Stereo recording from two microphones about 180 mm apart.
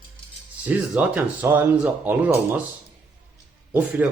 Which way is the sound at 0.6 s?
5° right (ahead or behind).